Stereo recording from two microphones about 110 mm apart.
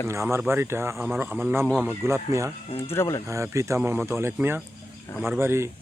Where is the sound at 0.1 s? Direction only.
25° right (ahead or behind).